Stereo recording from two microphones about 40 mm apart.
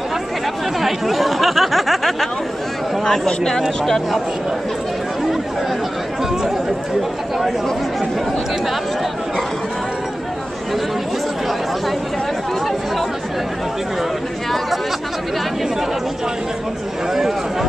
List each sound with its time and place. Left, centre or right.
0.7 s a sound: centre
3.3 s speech: centre
17.1 s speech: centre